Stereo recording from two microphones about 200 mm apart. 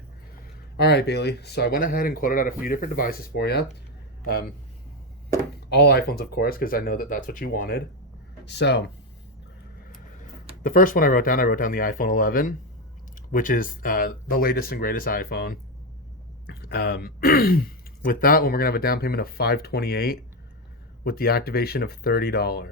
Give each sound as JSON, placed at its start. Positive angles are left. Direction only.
{"t": 0.8, "sound": "speech", "side_deg": 55}
{"t": 5.7, "sound": "speech", "side_deg": 55}
{"t": 8.4, "sound": "speech", "side_deg": 60}
{"t": 10.6, "sound": "speech", "side_deg": 45}